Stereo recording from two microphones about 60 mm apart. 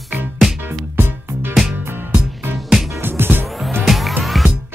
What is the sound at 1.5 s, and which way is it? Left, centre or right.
Music, centre.